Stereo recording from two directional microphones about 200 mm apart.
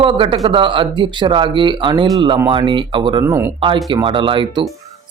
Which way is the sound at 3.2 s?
15° right (ahead or behind).